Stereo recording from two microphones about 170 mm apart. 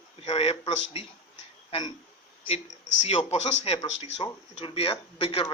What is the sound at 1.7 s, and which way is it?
Speech, 25° left (ahead or behind).